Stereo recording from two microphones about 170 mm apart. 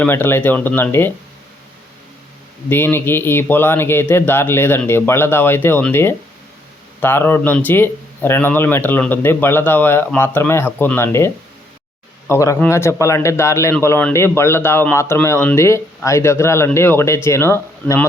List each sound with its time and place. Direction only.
0.0 s speech: 10° left (ahead or behind)
2.6 s speech: 10° left (ahead or behind)
12.3 s speech: 20° left (ahead or behind)